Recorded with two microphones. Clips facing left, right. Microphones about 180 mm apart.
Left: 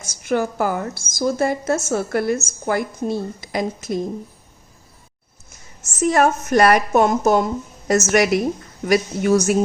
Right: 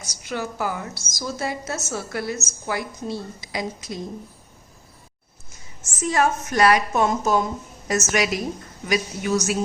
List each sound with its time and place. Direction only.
0.0 s a woman's voice: 50° left (ahead or behind)
6.1 s a woman's voice: 55° left (ahead or behind)